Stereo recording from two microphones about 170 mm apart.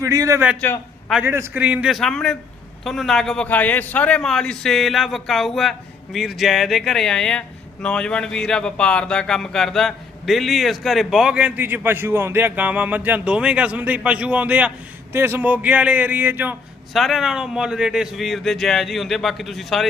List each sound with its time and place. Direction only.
0.0 s a man's voice: 20° right (ahead or behind)
0.6 s a man's voice: 10° left (ahead or behind)
1.2 s a man's voice: 15° right (ahead or behind)
16.9 s speech: centre (ahead or behind)